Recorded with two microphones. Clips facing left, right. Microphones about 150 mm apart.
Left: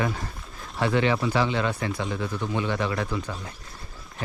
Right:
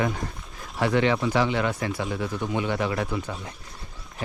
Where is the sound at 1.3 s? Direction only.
20° right (ahead or behind).